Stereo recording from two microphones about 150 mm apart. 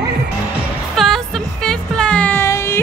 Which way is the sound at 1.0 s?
5° left (ahead or behind).